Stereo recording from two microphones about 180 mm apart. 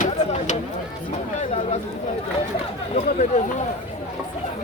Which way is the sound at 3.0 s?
40° left (ahead or behind).